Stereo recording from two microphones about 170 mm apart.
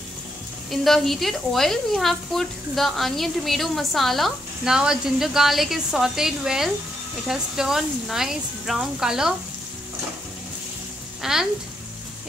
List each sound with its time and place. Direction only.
0.7 s speech: centre (ahead or behind)
11.2 s speech: 5° right (ahead or behind)